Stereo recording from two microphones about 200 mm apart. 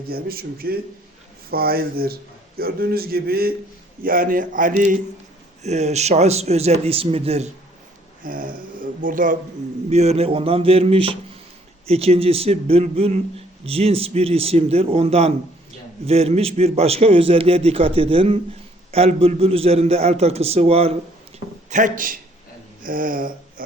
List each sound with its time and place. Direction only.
0.1 s a man's voice: 50° right (ahead or behind); by 7.5 s 30° right (ahead or behind)
8.2 s a man's voice: 45° right (ahead or behind)
21.3 s a sound: 40° right (ahead or behind)
22.8 s speech: 45° right (ahead or behind)